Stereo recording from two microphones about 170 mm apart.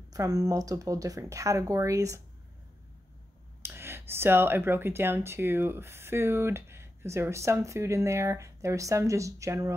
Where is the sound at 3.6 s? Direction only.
15° right (ahead or behind).